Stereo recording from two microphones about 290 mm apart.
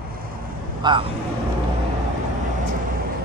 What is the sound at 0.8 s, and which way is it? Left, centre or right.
Speech, centre.